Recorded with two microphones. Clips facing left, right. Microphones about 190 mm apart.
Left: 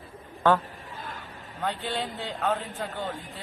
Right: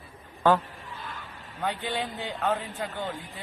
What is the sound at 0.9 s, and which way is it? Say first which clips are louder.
Vehicle: left 1 dB; 45° left (ahead or behind).